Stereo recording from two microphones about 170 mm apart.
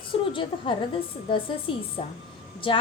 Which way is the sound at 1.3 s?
30° left (ahead or behind).